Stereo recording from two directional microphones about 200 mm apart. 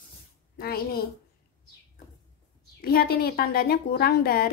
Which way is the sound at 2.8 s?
50° left (ahead or behind).